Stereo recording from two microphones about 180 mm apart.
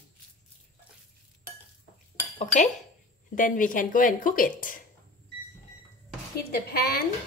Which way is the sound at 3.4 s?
50° left (ahead or behind).